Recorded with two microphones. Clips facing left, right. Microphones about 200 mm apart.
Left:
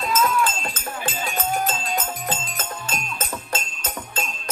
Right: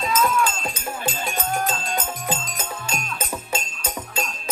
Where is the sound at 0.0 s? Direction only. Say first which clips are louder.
Even; 5° left (ahead or behind).